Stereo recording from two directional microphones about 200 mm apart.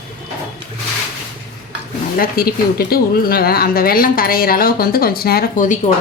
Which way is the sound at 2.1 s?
50° left (ahead or behind).